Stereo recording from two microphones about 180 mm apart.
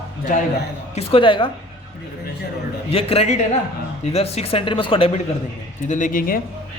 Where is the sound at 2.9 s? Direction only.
35° left (ahead or behind).